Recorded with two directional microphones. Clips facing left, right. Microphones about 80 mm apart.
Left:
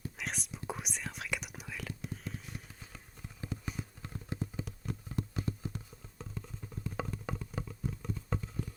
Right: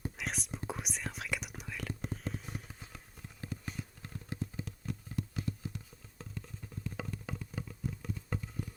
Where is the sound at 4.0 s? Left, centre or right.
Centre.